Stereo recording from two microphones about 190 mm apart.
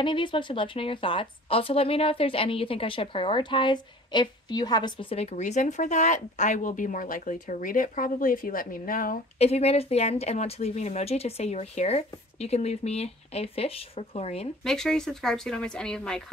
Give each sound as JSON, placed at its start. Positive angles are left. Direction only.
{"t": 0.0, "sound": "speech", "side_deg": 25}
{"t": 9.4, "sound": "speech", "side_deg": 35}
{"t": 14.6, "sound": "speech", "side_deg": 5}